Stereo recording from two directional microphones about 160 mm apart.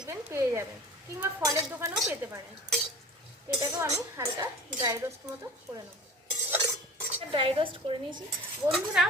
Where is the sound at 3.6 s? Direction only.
20° right (ahead or behind).